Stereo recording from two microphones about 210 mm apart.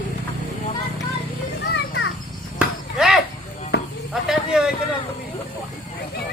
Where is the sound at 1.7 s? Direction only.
55° left (ahead or behind).